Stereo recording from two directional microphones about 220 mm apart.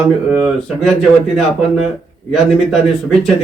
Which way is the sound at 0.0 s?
5° right (ahead or behind).